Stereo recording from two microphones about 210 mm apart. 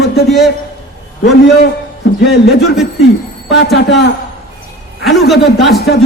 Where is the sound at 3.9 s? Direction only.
55° left (ahead or behind).